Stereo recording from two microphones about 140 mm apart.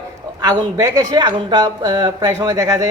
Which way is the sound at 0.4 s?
25° right (ahead or behind).